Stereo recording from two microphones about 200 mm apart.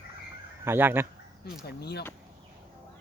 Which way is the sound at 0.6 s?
10° right (ahead or behind).